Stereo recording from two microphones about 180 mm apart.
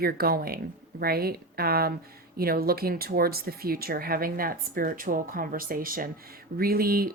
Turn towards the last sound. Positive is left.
turn(degrees=-55)  # may be behind; listen again after turning